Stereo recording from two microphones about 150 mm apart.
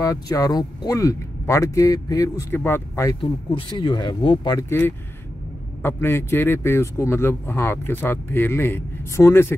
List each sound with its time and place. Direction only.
0.0 s speech: 20° left (ahead or behind)
3.2 s speech: 30° left (ahead or behind)
4.6 s speech: 15° left (ahead or behind)